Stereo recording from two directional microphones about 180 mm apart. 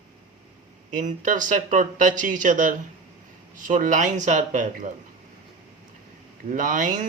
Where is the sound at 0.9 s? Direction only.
45° right (ahead or behind).